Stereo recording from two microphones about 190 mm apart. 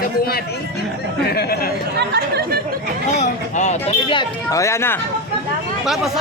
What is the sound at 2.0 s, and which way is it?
Speech, 60° right (ahead or behind).